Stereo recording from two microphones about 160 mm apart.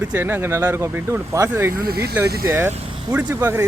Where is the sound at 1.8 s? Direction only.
75° right (ahead or behind).